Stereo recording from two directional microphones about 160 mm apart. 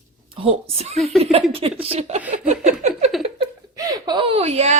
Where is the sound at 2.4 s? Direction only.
45° right (ahead or behind).